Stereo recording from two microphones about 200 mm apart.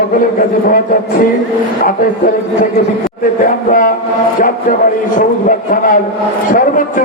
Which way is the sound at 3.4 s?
40° left (ahead or behind).